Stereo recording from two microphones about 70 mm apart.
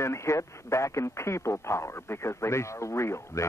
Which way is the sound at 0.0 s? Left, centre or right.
Left.